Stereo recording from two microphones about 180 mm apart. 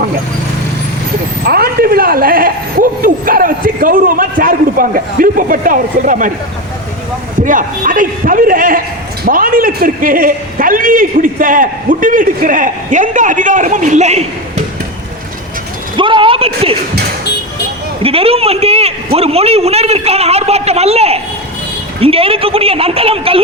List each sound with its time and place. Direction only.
1.5 s a man's voice: 60° right (ahead or behind)
7.4 s a man's voice: 50° right (ahead or behind)
16.0 s a sound: 30° right (ahead or behind)
18.0 s a man's voice: 30° right (ahead or behind)